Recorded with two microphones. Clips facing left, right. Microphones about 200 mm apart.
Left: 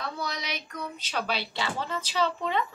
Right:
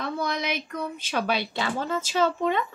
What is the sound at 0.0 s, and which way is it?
A woman's voice, 55° right (ahead or behind).